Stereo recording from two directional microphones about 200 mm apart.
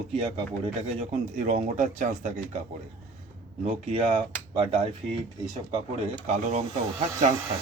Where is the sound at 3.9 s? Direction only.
30° right (ahead or behind).